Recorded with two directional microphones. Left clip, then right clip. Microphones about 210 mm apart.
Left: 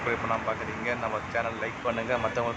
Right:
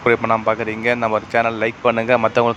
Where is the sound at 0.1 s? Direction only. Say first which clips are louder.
Right 13 dB; 40° right (ahead or behind).